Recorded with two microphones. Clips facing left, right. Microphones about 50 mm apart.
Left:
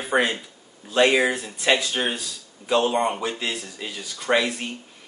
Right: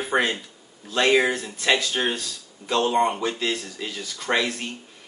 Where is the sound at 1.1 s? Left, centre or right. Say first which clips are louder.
Right 1 dB; centre.